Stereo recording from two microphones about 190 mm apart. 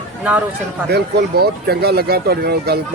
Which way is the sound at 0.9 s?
55° right (ahead or behind).